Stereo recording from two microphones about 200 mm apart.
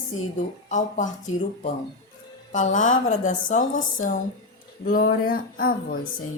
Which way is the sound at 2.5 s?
35° left (ahead or behind).